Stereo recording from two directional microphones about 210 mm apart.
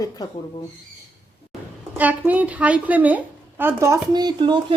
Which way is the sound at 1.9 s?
5° right (ahead or behind).